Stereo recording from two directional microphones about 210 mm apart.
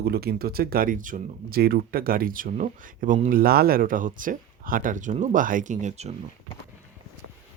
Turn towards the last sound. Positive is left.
turn(degrees=-30)  # may be behind; listen again after turning